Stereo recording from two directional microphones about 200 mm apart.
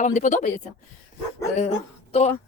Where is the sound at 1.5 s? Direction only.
35° left (ahead or behind).